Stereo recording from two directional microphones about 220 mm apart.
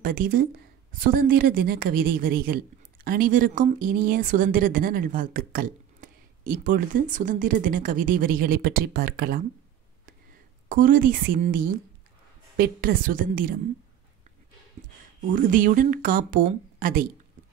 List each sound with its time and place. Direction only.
0.0 s a woman's voice: 40° right (ahead or behind)
10.7 s a woman's voice: 40° right (ahead or behind)
15.3 s a woman's voice: 40° right (ahead or behind)